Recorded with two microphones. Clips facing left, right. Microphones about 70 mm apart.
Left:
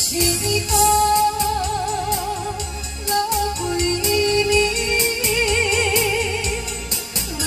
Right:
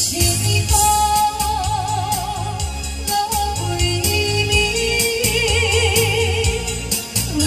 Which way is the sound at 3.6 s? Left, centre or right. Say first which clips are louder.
Left 2 dB; left.